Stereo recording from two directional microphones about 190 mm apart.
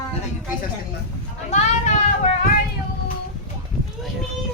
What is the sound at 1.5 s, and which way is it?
Speech, 35° left (ahead or behind).